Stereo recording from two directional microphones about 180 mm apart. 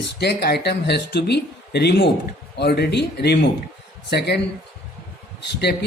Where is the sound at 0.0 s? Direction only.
65° left (ahead or behind).